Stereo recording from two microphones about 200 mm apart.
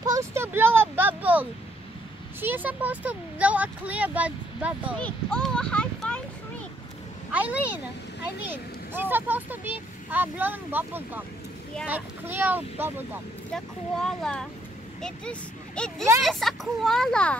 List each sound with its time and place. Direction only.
0.0 s a sound: 15° right (ahead or behind)
2.4 s speech: 10° right (ahead or behind)
4.9 s speech: 5° left (ahead or behind)
7.3 s speech: 5° right (ahead or behind)
13.5 s speech: 5° left (ahead or behind)